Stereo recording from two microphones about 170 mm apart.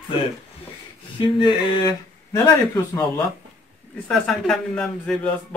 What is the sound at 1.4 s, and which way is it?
Speech, 25° left (ahead or behind).